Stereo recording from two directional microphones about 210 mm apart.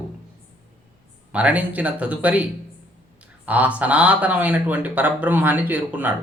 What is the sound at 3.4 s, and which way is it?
Speech, 5° right (ahead or behind).